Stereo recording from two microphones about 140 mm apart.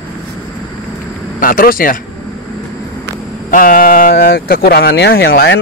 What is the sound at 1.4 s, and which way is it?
Speech, 90° left.